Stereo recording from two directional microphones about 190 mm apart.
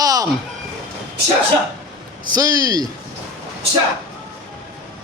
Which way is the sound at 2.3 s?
20° right (ahead or behind).